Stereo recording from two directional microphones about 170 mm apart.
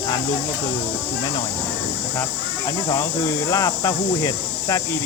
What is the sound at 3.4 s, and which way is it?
Speech, 20° left (ahead or behind).